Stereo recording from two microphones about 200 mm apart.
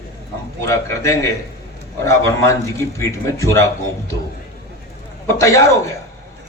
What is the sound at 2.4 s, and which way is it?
A man's voice, 15° left (ahead or behind).